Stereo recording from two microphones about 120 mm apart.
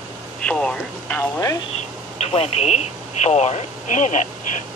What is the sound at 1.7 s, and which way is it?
Speech, 60° left (ahead or behind).